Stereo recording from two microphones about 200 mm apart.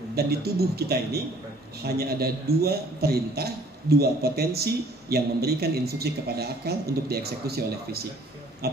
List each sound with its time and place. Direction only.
0.1 s a man's voice: 50° right (ahead or behind)